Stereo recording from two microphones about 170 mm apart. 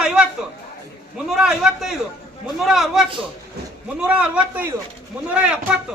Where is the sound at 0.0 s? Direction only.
5° right (ahead or behind).